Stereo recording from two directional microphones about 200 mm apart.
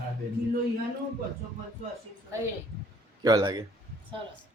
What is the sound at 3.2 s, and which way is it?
Speech, 20° right (ahead or behind).